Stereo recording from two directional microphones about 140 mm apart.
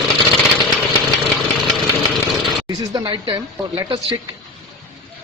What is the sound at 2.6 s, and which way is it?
Speech, 25° right (ahead or behind).